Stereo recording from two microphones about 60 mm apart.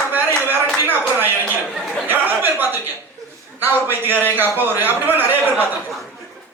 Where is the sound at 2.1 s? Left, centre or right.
Right.